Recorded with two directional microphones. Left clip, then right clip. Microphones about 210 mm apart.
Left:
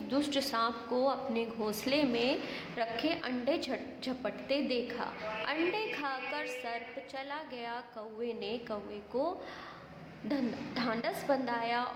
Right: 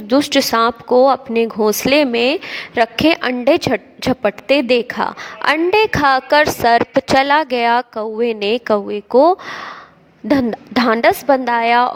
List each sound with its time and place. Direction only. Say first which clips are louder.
0.1 s a woman's voice: right 19 dB; 45° right (ahead or behind)